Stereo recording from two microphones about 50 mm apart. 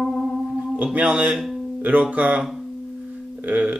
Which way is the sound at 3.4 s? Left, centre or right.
Right.